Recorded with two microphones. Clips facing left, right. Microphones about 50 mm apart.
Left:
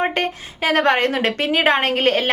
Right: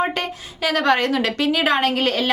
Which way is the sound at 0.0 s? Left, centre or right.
Left.